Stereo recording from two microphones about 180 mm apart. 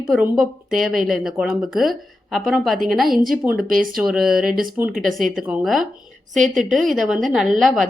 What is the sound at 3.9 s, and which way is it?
A woman's voice, 5° right (ahead or behind).